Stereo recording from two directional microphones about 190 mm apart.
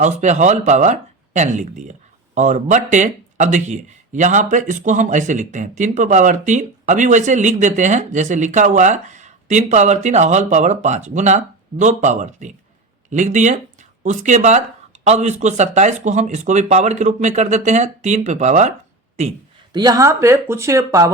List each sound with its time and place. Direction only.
0.0 s speech: 40° right (ahead or behind)
19.7 s speech: 20° right (ahead or behind)